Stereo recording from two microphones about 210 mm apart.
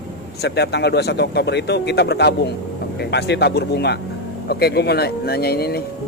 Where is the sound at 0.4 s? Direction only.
50° left (ahead or behind).